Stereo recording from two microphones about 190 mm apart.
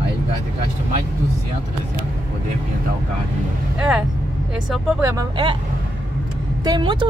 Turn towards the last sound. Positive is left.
turn(degrees=-25)  # may be behind; listen again after turning